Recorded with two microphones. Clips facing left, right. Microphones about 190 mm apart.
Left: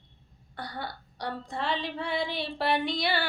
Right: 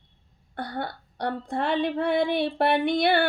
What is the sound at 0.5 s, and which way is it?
Child singing, 55° right (ahead or behind).